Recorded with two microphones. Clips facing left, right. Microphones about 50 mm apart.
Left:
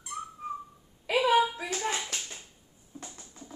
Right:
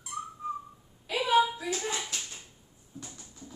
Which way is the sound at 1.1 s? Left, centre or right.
Left.